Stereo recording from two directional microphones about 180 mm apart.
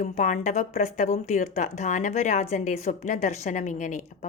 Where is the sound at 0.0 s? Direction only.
45° left (ahead or behind).